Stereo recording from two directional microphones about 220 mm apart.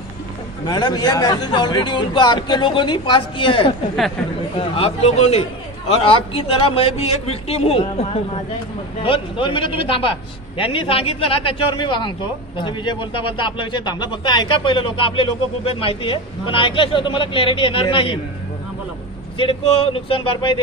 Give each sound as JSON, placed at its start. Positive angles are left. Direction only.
{"t": 0.7, "sound": "speech", "side_deg": 20}
{"t": 19.3, "sound": "speech", "side_deg": 25}